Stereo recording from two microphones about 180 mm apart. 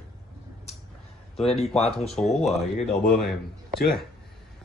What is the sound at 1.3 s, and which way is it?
Speech, 35° left (ahead or behind).